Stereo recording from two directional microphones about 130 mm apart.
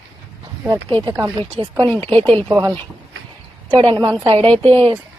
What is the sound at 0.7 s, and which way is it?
Speech, 35° right (ahead or behind).